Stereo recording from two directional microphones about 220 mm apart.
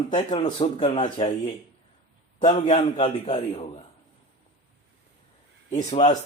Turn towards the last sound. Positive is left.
turn(degrees=35)  # may be behind; listen again after turning